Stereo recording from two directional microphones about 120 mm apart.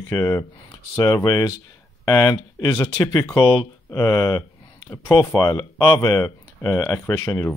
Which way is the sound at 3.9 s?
30° left (ahead or behind).